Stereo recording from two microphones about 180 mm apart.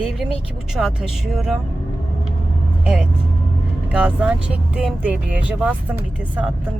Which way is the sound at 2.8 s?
5° right (ahead or behind).